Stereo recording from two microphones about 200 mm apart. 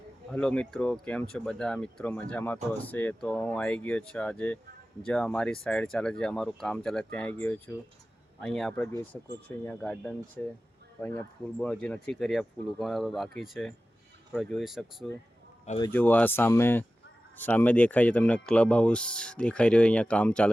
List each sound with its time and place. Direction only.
0.3 s speech: 5° left (ahead or behind)
15.8 s speech: 10° left (ahead or behind)